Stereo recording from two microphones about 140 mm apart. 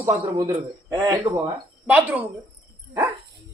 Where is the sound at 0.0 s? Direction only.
20° right (ahead or behind).